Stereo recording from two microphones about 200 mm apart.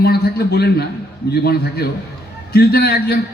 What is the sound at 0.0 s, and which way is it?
A man's voice, 50° left (ahead or behind).